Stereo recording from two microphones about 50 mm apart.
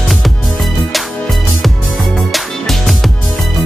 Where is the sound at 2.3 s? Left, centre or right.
Centre.